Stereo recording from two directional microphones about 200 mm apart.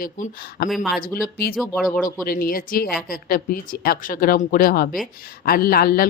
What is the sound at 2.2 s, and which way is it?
A woman's voice, 45° left (ahead or behind).